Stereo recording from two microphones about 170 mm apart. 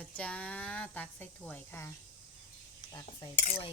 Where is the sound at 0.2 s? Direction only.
5° left (ahead or behind).